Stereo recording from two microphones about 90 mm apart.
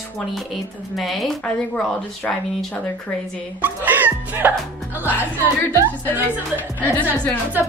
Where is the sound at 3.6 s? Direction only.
20° right (ahead or behind).